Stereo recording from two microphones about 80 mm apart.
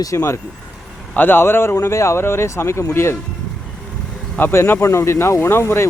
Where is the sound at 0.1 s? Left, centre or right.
Left.